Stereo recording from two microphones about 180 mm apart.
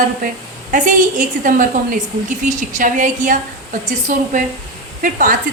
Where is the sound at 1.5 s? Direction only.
45° right (ahead or behind).